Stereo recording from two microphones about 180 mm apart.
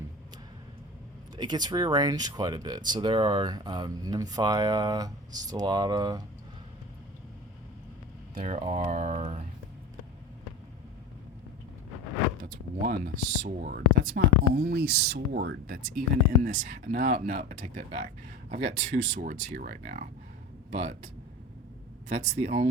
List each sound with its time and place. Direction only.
1.4 s speech: 25° right (ahead or behind)
8.4 s speech: 40° right (ahead or behind)
12.4 s speech: 50° right (ahead or behind)
22.1 s speech: 40° right (ahead or behind)